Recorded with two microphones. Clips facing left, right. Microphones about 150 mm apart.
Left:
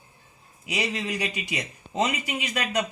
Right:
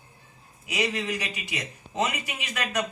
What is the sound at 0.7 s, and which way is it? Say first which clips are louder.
A man's voice: even; 30° left (ahead or behind).